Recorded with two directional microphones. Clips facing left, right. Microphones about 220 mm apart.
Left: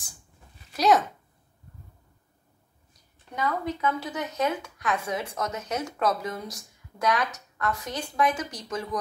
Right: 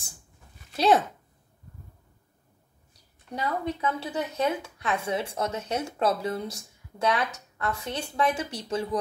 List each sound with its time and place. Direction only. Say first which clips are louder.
0.7 s speech: even; 30° right (ahead or behind)
2.9 s speech: right 6 dB; 30° right (ahead or behind)